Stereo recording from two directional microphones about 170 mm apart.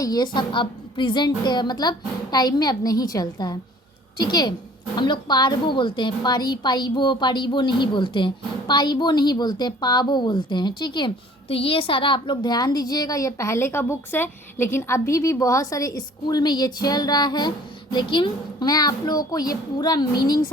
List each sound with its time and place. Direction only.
0.0 s a woman's voice: 25° left (ahead or behind)